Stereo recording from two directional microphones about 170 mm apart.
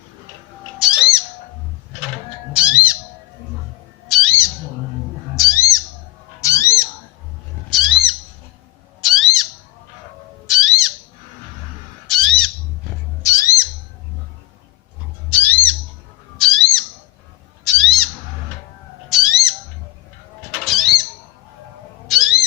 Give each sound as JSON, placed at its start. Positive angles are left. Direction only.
{"t": 0.8, "sound": "bird", "side_deg": -5}
{"t": 2.5, "sound": "squawk", "side_deg": -5}
{"t": 4.1, "sound": "bird", "side_deg": 0}
{"t": 5.4, "sound": "bird", "side_deg": 20}
{"t": 6.4, "sound": "a sound", "side_deg": 20}
{"t": 7.7, "sound": "a sound", "side_deg": -5}
{"t": 9.0, "sound": "bird", "side_deg": 0}
{"t": 12.0, "sound": "squawk", "side_deg": 0}
{"t": 13.2, "sound": "music", "side_deg": 20}
{"t": 15.3, "sound": "squawk", "side_deg": 10}
{"t": 16.4, "sound": "bird", "side_deg": 5}
{"t": 20.5, "sound": "cat", "side_deg": 0}
{"t": 22.1, "sound": "owl", "side_deg": 0}